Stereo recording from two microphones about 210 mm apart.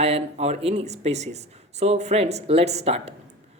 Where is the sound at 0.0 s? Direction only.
30° right (ahead or behind).